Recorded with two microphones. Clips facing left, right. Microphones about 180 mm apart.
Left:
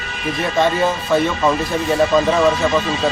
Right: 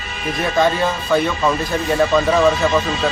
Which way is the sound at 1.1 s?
Centre (ahead or behind).